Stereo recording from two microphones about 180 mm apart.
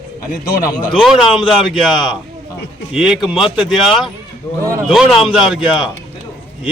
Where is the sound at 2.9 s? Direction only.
Centre (ahead or behind).